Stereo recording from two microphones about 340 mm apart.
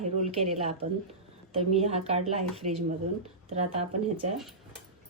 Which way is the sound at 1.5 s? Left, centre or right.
Centre.